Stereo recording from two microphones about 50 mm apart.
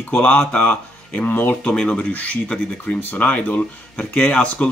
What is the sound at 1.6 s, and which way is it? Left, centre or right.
Speech, centre.